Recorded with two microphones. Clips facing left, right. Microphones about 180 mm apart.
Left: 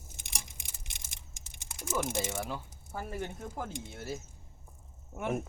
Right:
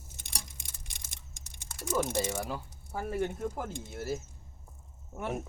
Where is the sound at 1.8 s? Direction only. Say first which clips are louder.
Right 3 dB; 5° left (ahead or behind).